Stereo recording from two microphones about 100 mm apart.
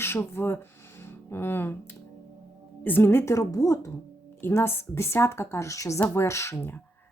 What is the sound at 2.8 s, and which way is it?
A woman's voice, 20° left (ahead or behind).